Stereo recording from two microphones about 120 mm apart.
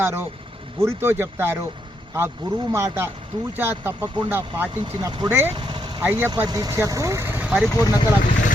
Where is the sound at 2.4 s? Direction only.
35° right (ahead or behind).